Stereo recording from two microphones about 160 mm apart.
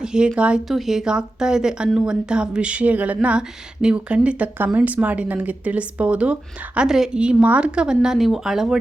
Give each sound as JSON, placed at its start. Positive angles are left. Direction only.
{"t": 0.0, "sound": "a woman's voice", "side_deg": -5}